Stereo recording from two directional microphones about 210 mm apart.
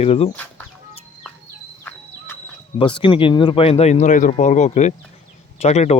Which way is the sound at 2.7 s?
25° left (ahead or behind).